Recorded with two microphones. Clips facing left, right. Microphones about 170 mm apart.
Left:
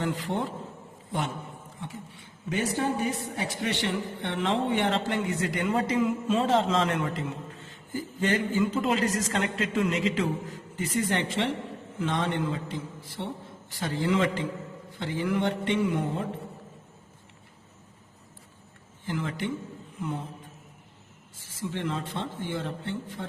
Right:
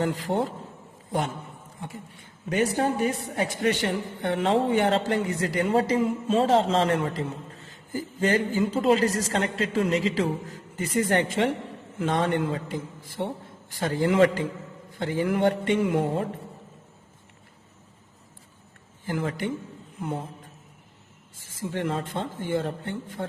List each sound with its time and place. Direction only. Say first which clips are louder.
0.0 s a man's voice: right 4 dB; 40° right (ahead or behind)
2.1 s a man's voice: right 6 dB; 50° right (ahead or behind)
19.0 s speech: right 3 dB; 45° right (ahead or behind)
21.6 s speech: right 3 dB; 45° right (ahead or behind)